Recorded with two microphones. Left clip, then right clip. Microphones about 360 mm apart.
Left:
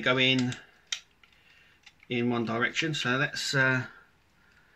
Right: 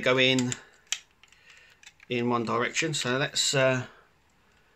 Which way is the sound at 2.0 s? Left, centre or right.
Centre.